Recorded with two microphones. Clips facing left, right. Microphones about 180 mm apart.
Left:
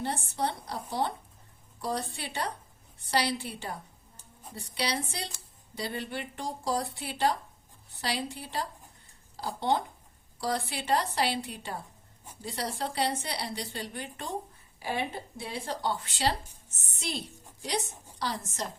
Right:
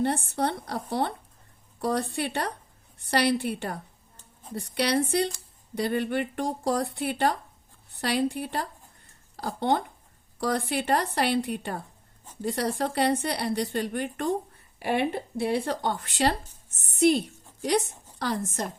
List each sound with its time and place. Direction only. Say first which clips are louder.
0.0 s a woman's voice: right 6 dB; 60° right (ahead or behind)